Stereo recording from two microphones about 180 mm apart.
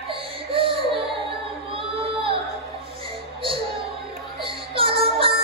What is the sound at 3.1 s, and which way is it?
Music, 30° right (ahead or behind).